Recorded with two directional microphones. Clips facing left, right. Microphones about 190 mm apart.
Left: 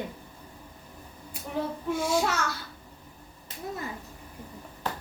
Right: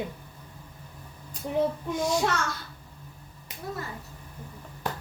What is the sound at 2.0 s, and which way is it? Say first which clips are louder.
Speech: right 1 dB; 5° left (ahead or behind).